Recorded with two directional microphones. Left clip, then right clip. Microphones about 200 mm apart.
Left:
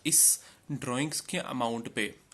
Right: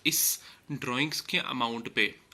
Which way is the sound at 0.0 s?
40° left (ahead or behind).